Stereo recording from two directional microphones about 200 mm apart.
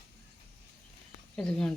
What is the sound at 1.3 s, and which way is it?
Speech, 5° left (ahead or behind).